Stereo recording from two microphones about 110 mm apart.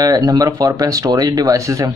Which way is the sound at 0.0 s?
35° right (ahead or behind).